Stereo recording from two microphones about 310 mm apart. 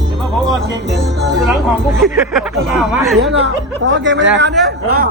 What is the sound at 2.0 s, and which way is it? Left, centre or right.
Speech, centre.